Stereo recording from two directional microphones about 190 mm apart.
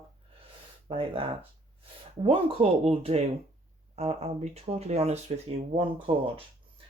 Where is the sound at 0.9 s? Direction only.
30° right (ahead or behind).